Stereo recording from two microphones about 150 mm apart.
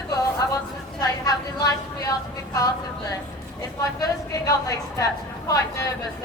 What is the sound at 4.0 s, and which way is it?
A woman's voice, 20° left (ahead or behind).